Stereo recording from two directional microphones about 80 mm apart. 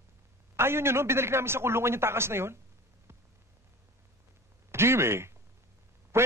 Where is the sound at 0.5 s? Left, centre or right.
Right.